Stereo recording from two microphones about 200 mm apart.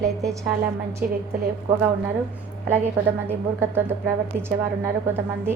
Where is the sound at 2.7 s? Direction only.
10° right (ahead or behind).